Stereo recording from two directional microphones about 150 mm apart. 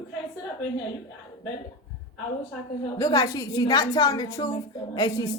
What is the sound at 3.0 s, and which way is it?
A woman's voice, 25° left (ahead or behind).